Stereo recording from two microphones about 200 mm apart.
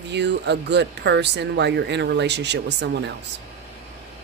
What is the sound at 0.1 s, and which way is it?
Speech, 60° right (ahead or behind).